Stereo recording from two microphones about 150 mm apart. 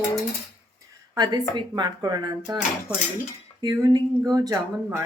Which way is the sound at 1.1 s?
25° right (ahead or behind).